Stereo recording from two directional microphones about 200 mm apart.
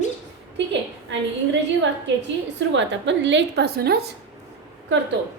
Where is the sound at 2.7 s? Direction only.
65° right (ahead or behind).